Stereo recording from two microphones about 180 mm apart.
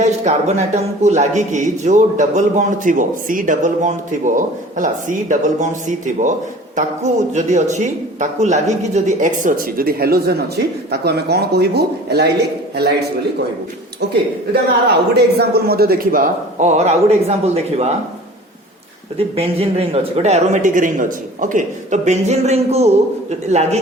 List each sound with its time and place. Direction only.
0.0 s speech: 40° right (ahead or behind)
6.7 s speech: 40° right (ahead or behind); by 12.3 s 65° right (ahead or behind)
14.5 s speech: 60° right (ahead or behind); by 17.9 s 35° right (ahead or behind)
19.1 s speech: 35° right (ahead or behind)